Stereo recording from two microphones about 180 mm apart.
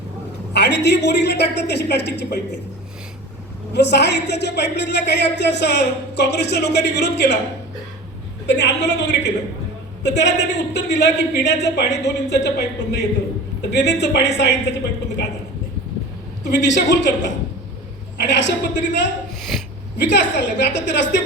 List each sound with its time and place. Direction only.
0.5 s a woman's voice: 70° left (ahead or behind)
3.7 s a woman's voice: 70° left (ahead or behind)
8.4 s a woman's voice: 70° left (ahead or behind)
16.4 s a sound: 70° left (ahead or behind)
16.7 s a woman's voice: 75° left (ahead or behind)
19.4 s sneeze: centre (ahead or behind)
20.0 s a woman's voice: 75° left (ahead or behind)